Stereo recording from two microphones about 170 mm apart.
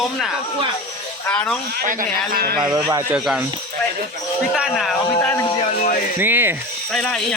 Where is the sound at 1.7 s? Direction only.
55° right (ahead or behind).